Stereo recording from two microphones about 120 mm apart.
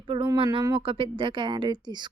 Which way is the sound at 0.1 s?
45° right (ahead or behind).